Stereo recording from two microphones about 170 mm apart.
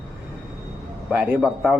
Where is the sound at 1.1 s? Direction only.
5° right (ahead or behind).